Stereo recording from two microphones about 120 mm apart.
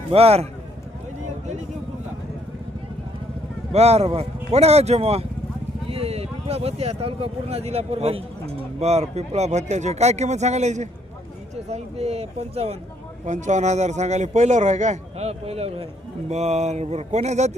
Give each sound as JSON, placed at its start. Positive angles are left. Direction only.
{"t": 0.1, "sound": "speech", "side_deg": -55}
{"t": 3.7, "sound": "a man's voice", "side_deg": -60}
{"t": 13.2, "sound": "a man's voice", "side_deg": -80}